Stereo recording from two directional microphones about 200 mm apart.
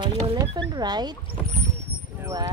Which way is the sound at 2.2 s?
20° right (ahead or behind).